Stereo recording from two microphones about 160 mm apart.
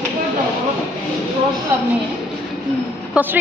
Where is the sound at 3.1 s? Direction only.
10° right (ahead or behind).